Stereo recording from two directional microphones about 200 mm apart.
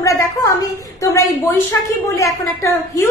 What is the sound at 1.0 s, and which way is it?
A woman's voice, 15° left (ahead or behind).